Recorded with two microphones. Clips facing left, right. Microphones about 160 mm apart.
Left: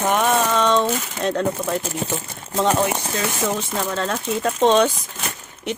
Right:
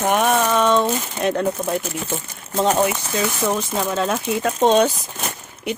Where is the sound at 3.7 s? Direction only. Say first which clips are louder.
Right 2 dB; 10° right (ahead or behind).